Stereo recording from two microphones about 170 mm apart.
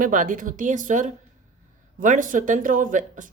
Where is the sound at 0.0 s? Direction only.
50° right (ahead or behind).